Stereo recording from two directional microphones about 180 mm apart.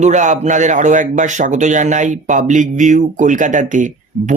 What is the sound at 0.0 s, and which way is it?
Speech, 40° right (ahead or behind).